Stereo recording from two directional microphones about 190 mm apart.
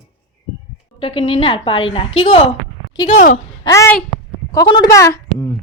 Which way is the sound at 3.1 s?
40° left (ahead or behind).